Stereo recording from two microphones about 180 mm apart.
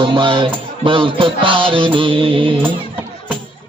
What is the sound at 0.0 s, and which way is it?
Music, 25° right (ahead or behind).